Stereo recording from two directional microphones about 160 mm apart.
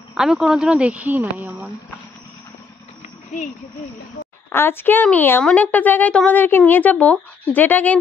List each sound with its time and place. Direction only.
0.1 s speech: 5° right (ahead or behind)
3.3 s speech: 50° left (ahead or behind)
4.5 s a woman's voice: 15° left (ahead or behind)